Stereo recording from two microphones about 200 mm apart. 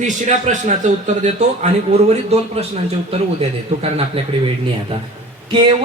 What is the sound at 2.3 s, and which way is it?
A man's voice, 30° right (ahead or behind).